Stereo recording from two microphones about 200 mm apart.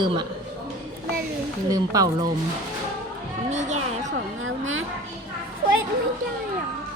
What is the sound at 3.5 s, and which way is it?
Speech, 35° right (ahead or behind).